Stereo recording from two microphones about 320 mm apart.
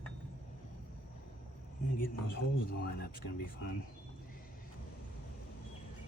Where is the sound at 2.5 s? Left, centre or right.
Left.